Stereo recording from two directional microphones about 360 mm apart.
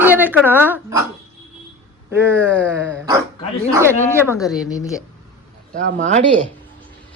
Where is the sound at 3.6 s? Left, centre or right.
Centre.